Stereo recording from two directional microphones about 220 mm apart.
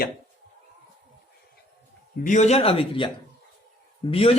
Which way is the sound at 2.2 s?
35° left (ahead or behind).